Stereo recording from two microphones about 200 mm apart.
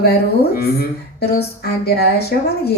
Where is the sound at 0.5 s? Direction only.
50° left (ahead or behind).